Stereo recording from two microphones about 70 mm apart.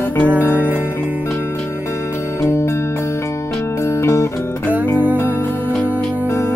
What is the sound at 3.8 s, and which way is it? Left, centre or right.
Music, left.